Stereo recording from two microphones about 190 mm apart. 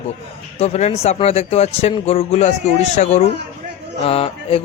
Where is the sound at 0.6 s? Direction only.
35° left (ahead or behind).